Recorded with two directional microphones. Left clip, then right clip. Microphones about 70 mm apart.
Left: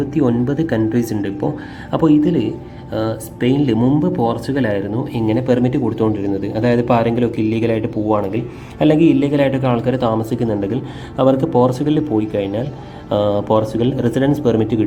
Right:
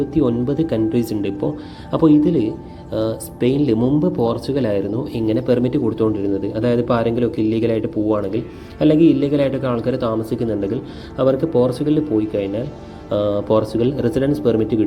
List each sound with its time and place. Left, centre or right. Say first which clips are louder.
0.2 s speech: left 1 dB; centre
7.3 s speech: left 1 dB; right
11.7 s speech: left 1 dB; centre
11.9 s speech: left 1 dB; centre